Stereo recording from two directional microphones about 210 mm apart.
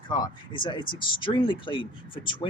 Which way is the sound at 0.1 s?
20° left (ahead or behind).